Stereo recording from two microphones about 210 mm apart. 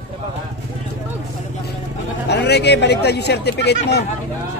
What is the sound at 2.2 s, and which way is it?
Speech, 50° left (ahead or behind).